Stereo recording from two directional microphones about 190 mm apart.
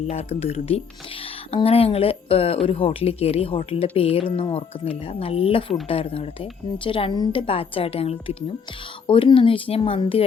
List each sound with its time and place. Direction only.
0.1 s a woman's voice: 30° left (ahead or behind)